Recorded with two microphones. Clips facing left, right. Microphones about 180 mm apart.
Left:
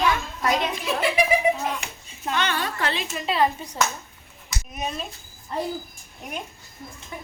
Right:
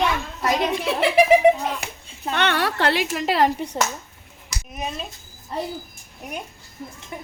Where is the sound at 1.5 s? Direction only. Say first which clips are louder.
Right 6 dB; 65° right (ahead or behind); by 3.7 s 85° right.